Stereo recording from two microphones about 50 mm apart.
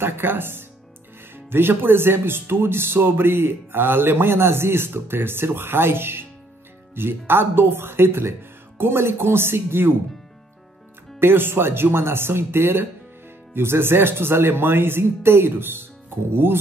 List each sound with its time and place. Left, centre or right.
0.0 s speech: right
11.1 s speech: right